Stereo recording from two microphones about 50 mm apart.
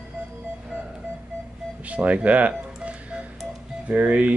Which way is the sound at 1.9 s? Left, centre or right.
Right.